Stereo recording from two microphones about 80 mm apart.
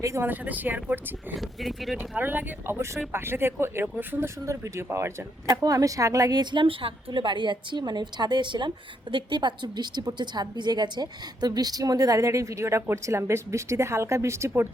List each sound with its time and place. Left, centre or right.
0.2 s speech: right
1.4 s speech: centre
2.0 s speech: right
5.5 s a woman's voice: right
6.4 s a woman's voice: right